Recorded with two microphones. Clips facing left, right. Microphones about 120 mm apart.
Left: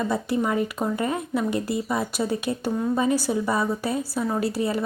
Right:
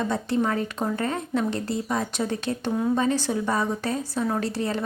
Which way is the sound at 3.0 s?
10° left (ahead or behind).